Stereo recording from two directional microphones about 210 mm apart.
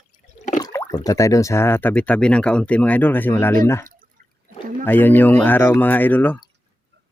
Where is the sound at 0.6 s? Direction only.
15° left (ahead or behind).